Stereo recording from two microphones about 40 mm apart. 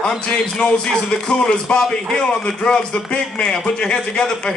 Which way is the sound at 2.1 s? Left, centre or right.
Left.